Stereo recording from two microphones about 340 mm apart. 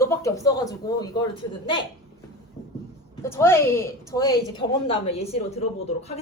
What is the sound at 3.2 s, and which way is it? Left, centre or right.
A woman's voice, centre.